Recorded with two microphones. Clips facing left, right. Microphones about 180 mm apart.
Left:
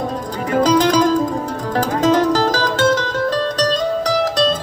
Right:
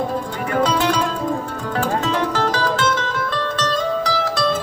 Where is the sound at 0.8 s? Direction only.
40° left (ahead or behind).